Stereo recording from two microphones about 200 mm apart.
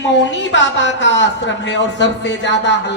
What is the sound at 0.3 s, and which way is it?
Speech, 65° left (ahead or behind).